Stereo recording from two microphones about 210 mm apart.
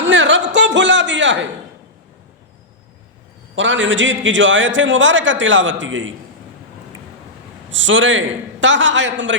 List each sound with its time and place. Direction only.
0.0 s a sound: 60° right (ahead or behind)
3.5 s a man's voice: 60° right (ahead or behind)
7.7 s a man's voice: 65° right (ahead or behind)